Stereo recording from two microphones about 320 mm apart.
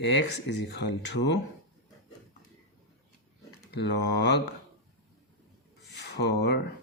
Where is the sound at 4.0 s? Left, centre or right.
Left.